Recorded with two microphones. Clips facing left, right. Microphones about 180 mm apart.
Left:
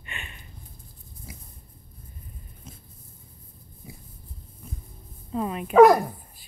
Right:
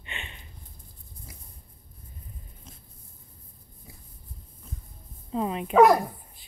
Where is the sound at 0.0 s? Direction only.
25° right (ahead or behind).